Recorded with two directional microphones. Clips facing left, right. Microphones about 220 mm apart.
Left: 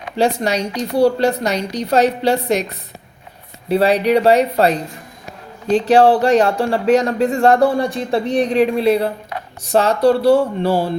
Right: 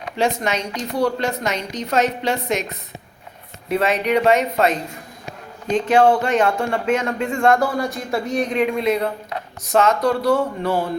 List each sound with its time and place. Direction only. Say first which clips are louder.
0.2 s speech: left 4 dB; 35° left (ahead or behind)
3.7 s speech: left 5 dB; 35° left (ahead or behind)